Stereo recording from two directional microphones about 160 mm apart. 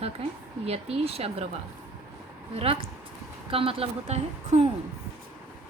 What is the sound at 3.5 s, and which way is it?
A woman's voice, 35° right (ahead or behind).